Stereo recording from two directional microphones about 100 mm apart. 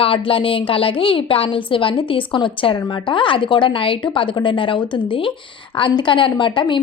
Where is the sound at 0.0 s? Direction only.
65° left (ahead or behind).